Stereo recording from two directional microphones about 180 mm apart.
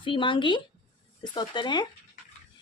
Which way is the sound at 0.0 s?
30° left (ahead or behind).